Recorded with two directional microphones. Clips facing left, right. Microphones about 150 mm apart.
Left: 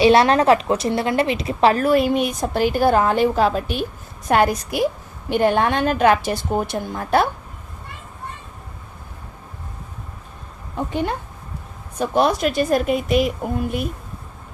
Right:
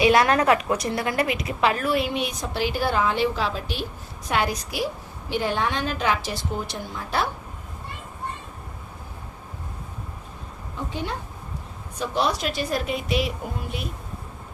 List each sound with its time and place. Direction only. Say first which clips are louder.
0.0 s a woman's voice: left 5 dB; 30° left (ahead or behind); by 7.3 s 55° left (ahead or behind)
10.8 s a woman's voice: left 7 dB; 55° left (ahead or behind)